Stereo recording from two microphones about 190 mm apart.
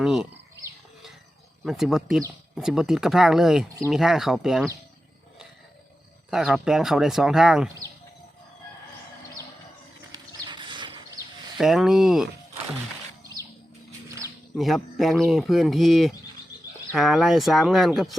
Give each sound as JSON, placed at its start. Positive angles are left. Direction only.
{"t": 0.0, "sound": "speech", "side_deg": 0}
{"t": 1.6, "sound": "speech", "side_deg": 0}
{"t": 6.3, "sound": "speech", "side_deg": -5}
{"t": 10.1, "sound": "a sound", "side_deg": -25}
{"t": 11.5, "sound": "speech", "side_deg": 0}
{"t": 14.5, "sound": "speech", "side_deg": 0}